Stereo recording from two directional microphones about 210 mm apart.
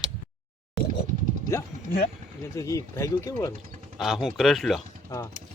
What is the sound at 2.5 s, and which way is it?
Speech, 15° left (ahead or behind).